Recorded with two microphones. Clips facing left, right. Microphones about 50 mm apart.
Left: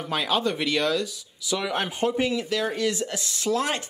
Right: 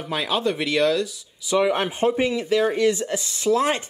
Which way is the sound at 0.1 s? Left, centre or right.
Centre.